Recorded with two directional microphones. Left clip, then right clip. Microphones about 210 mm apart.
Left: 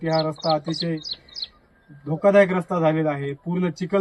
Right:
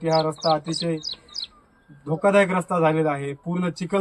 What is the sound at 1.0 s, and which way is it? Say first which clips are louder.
Speech: even; 55° right (ahead or behind).